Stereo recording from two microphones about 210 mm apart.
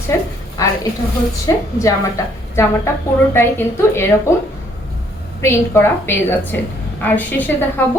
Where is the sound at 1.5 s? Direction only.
15° left (ahead or behind).